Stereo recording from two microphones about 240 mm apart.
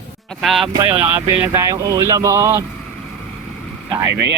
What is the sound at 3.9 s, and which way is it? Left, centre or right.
Speech, centre.